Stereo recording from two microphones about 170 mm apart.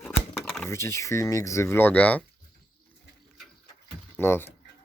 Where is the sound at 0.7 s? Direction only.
15° left (ahead or behind).